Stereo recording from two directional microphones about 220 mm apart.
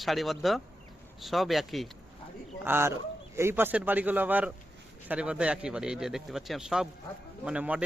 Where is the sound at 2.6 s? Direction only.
10° right (ahead or behind).